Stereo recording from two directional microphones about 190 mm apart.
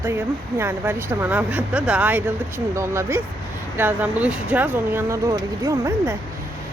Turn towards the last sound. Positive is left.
turn(degrees=-15)  # may be behind; listen again after turning